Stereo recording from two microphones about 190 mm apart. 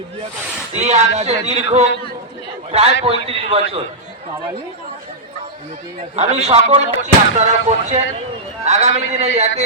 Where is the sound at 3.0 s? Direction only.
30° right (ahead or behind).